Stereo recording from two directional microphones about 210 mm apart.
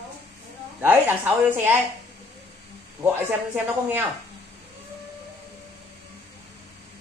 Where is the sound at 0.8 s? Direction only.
10° right (ahead or behind).